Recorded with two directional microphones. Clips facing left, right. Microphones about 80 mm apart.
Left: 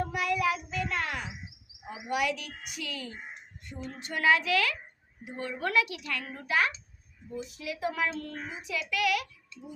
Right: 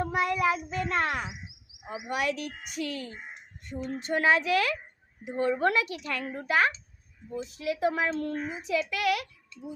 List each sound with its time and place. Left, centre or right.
0.1 s child singing: right
2.0 s a child's voice: right